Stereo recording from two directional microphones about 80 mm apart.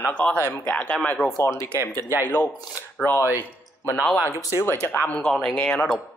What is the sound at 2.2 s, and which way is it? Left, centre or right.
Speech, left.